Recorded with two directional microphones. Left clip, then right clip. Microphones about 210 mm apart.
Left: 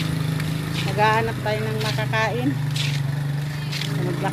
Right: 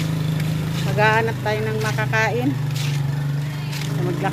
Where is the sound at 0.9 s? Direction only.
Centre (ahead or behind).